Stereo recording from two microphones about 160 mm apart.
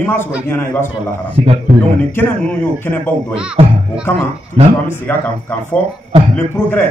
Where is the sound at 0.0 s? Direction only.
15° left (ahead or behind).